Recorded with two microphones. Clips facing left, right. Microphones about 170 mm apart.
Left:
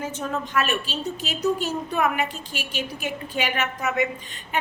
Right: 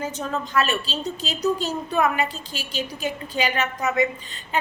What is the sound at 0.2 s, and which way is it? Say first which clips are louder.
A woman's voice: right 1 dB; 10° left (ahead or behind).